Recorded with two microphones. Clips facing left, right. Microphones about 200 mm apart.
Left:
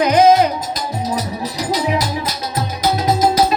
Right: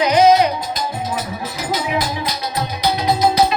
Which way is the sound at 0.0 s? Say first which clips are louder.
Left 1 dB; 50° left (ahead or behind).